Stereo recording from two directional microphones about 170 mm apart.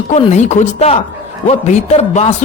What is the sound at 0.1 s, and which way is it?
A man's voice, 45° left (ahead or behind).